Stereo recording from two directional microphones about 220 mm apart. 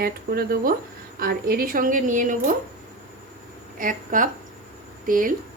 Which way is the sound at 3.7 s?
35° right (ahead or behind).